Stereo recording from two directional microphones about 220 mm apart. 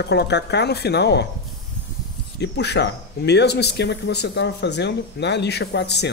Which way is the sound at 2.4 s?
50° left (ahead or behind).